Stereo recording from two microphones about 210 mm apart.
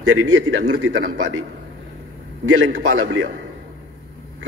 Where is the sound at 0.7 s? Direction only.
90° right.